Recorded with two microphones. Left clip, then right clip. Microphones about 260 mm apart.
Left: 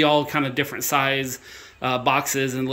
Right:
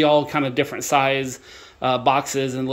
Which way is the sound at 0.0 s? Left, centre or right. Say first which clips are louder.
Right 2 dB; centre.